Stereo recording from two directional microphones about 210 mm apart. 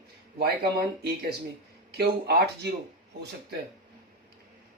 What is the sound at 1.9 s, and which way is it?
Speech, 50° right (ahead or behind).